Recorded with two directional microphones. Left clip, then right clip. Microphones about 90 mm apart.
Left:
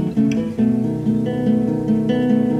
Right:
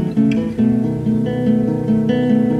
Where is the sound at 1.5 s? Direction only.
30° right (ahead or behind).